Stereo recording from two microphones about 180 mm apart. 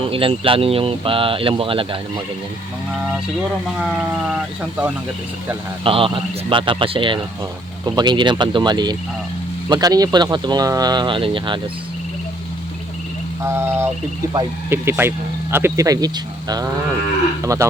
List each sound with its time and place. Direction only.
0.0 s speech: 30° right (ahead or behind)
3.8 s speech: centre (ahead or behind)
5.8 s speech: 30° right (ahead or behind)
13.4 s speech: 15° right (ahead or behind)